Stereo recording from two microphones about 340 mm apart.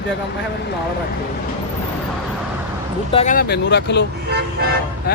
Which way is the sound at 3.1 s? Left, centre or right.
Centre.